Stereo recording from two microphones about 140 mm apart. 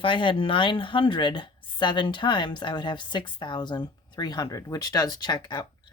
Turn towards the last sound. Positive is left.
turn(degrees=30)  # may be behind; listen again after turning